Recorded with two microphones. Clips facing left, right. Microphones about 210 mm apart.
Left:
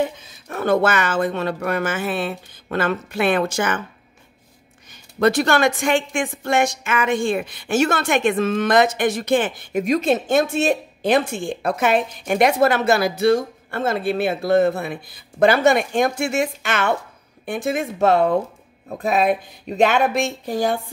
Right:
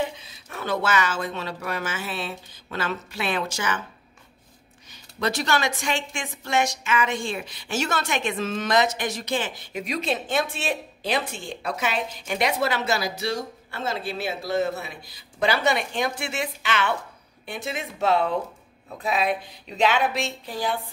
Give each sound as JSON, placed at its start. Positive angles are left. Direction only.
{"t": 0.0, "sound": "speech", "side_deg": 50}
{"t": 5.2, "sound": "a woman's voice", "side_deg": 55}